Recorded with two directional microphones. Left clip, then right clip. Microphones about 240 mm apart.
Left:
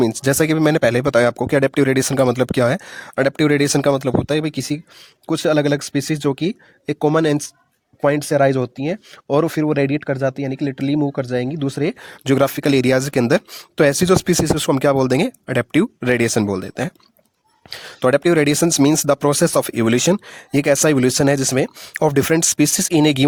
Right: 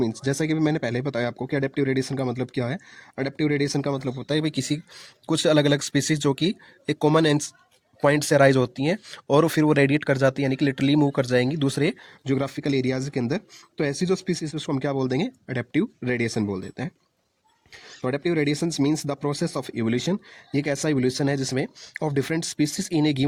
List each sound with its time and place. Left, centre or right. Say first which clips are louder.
0.0 s speech: left 9 dB; left; by 11.9 s centre
12.0 s speech: left 10 dB; left